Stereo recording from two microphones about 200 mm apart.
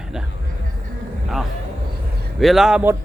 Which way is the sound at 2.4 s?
Centre (ahead or behind).